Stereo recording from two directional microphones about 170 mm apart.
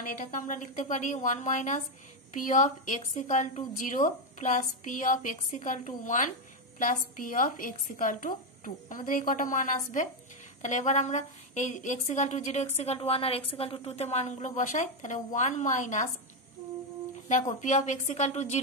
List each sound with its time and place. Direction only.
0.0 s a woman's voice: 50° left (ahead or behind)
17.3 s a woman's voice: 45° left (ahead or behind)